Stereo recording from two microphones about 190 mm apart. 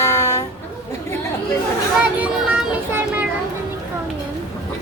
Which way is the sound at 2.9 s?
10° right (ahead or behind).